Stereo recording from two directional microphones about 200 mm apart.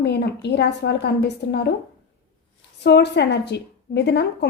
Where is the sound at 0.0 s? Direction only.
55° left (ahead or behind).